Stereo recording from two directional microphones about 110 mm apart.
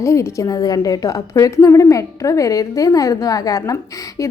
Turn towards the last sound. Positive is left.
turn(degrees=30)  # may be behind; listen again after turning